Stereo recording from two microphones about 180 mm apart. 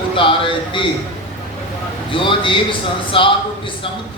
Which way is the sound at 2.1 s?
30° left (ahead or behind).